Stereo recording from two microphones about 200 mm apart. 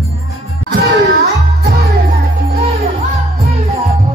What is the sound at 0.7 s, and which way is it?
Music, 55° right (ahead or behind).